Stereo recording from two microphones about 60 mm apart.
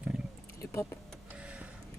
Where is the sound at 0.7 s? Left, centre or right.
Left.